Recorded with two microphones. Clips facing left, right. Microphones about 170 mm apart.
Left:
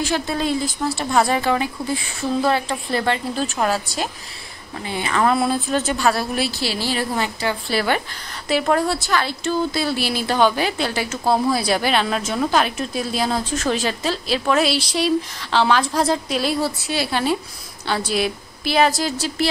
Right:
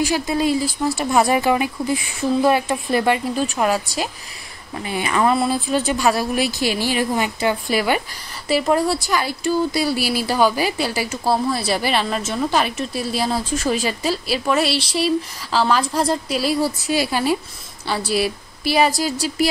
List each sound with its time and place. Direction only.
0.1 s a woman's voice: 10° right (ahead or behind)
5.2 s a woman's voice: 5° right (ahead or behind)